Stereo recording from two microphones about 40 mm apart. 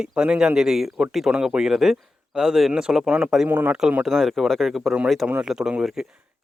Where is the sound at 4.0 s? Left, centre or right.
Centre.